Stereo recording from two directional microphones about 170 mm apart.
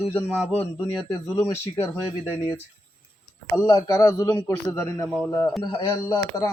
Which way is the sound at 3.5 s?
20° left (ahead or behind).